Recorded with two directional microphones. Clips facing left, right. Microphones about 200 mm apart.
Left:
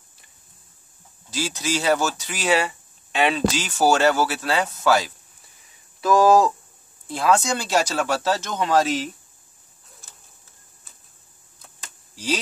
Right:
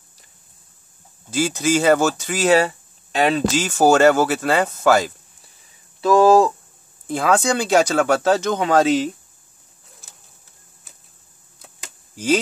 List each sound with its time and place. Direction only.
1.3 s speech: 50° right (ahead or behind)
5.9 s speech: 25° right (ahead or behind)
7.1 s speech: 55° right (ahead or behind)